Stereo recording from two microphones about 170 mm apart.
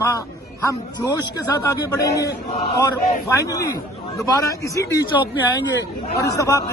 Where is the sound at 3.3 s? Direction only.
20° left (ahead or behind).